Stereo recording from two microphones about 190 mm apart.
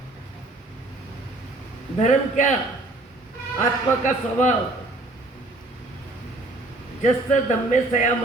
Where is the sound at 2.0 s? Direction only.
40° left (ahead or behind).